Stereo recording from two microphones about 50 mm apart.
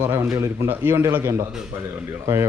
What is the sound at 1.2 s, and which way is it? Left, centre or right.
Speech, right.